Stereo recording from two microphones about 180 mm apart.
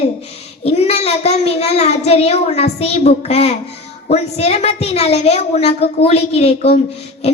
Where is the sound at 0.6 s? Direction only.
35° left (ahead or behind).